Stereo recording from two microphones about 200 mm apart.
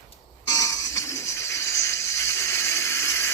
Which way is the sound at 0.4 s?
15° left (ahead or behind).